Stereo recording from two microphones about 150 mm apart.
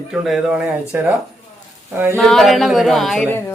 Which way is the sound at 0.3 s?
10° right (ahead or behind).